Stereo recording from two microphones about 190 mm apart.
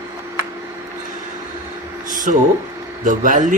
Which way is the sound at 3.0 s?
40° right (ahead or behind).